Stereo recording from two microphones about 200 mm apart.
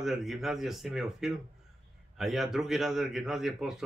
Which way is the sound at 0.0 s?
Centre (ahead or behind).